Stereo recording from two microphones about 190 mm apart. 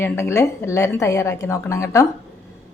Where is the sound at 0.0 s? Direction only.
15° left (ahead or behind).